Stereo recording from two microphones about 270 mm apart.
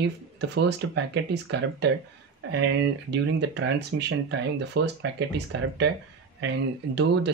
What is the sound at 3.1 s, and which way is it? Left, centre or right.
Speech, right.